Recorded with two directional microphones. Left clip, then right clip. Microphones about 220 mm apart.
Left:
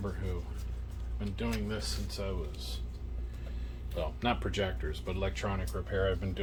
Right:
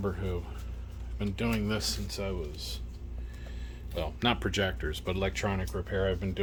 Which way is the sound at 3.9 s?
50° right (ahead or behind).